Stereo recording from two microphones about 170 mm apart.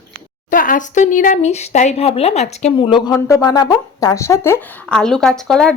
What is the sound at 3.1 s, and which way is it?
Speech, 20° left (ahead or behind).